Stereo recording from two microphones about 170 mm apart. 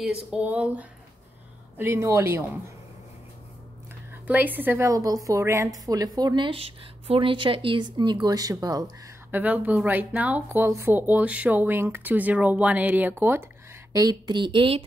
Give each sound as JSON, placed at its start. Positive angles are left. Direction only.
{"t": 0.0, "sound": "speech", "side_deg": -5}
{"t": 4.1, "sound": "a woman's voice", "side_deg": -10}
{"t": 9.3, "sound": "speech", "side_deg": -10}
{"t": 13.9, "sound": "a woman's voice", "side_deg": -25}